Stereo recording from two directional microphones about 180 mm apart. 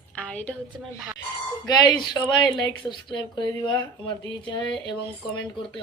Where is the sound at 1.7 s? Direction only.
25° left (ahead or behind).